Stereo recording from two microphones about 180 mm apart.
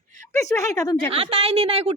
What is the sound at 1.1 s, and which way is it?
Speech, 30° right (ahead or behind).